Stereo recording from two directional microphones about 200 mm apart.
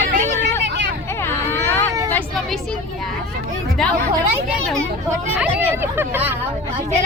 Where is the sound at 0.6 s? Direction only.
60° right (ahead or behind).